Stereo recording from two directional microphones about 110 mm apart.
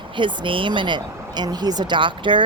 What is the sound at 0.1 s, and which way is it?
Speech, 45° right (ahead or behind).